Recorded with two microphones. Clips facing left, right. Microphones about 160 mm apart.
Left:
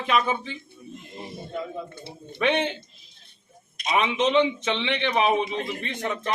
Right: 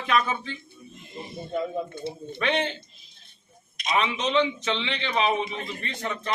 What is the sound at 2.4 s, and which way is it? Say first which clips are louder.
Speech: left 3 dB; 20° left (ahead or behind).